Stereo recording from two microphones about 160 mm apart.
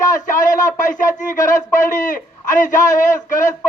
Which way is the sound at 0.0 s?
55° left (ahead or behind).